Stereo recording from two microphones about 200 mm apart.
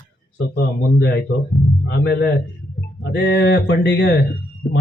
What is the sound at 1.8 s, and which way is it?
Speech, 55° left (ahead or behind).